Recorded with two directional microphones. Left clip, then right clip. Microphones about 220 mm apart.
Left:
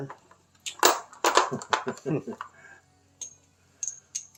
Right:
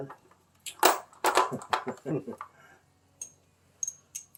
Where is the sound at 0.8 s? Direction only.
10° left (ahead or behind).